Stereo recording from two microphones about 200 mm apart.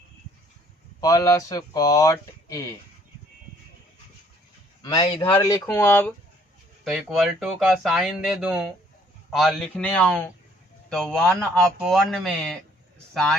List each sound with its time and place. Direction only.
1.0 s speech: 15° left (ahead or behind)
4.8 s a man's voice: 25° left (ahead or behind)
5.2 s speech: 15° left (ahead or behind)
6.8 s speech: centre (ahead or behind)